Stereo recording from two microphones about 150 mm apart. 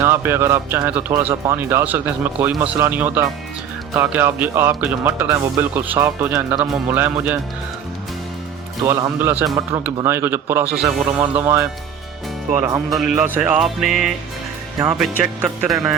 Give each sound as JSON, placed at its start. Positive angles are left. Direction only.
{"t": 0.0, "sound": "speech", "side_deg": -15}
{"t": 8.8, "sound": "speech", "side_deg": -20}